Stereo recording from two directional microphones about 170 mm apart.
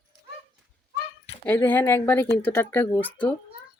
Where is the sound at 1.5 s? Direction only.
10° left (ahead or behind).